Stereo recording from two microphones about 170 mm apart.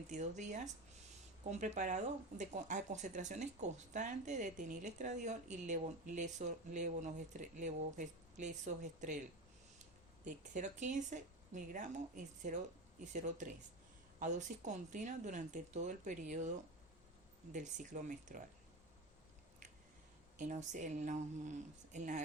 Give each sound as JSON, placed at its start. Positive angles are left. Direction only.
{"t": 0.1, "sound": "speech", "side_deg": -45}
{"t": 10.2, "sound": "speech", "side_deg": -45}
{"t": 17.5, "sound": "speech", "side_deg": -45}
{"t": 20.4, "sound": "speech", "side_deg": -45}